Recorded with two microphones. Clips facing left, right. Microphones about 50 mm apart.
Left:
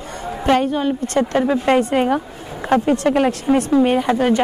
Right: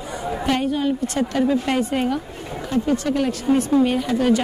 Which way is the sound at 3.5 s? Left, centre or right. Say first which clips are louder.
Left 1 dB; left.